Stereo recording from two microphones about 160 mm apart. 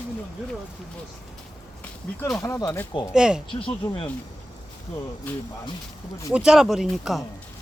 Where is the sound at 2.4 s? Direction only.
20° left (ahead or behind).